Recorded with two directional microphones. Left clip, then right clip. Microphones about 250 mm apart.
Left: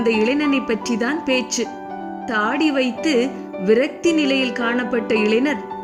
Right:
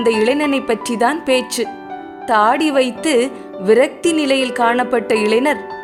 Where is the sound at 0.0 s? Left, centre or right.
Centre.